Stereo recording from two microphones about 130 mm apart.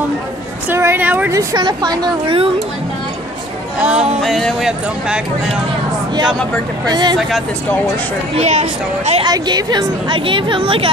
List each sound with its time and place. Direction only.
0.7 s speech: 20° right (ahead or behind)
1.3 s a woman's voice: 30° right (ahead or behind)
3.8 s speech: 10° right (ahead or behind)
6.9 s a woman's voice: 35° right (ahead or behind)
7.2 s speech: centre (ahead or behind)
8.4 s speech: 55° right (ahead or behind)
9.2 s a woman's voice: 30° right (ahead or behind)